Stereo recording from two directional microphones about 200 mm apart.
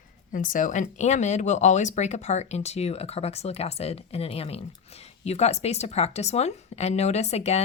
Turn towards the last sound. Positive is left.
turn(degrees=30)  # may be behind; listen again after turning